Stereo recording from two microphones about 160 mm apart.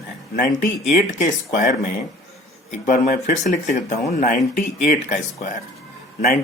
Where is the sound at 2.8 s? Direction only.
55° left (ahead or behind).